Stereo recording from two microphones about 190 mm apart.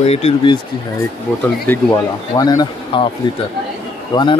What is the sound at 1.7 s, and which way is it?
Speech, 10° left (ahead or behind).